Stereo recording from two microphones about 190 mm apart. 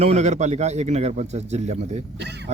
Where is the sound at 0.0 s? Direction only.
35° right (ahead or behind).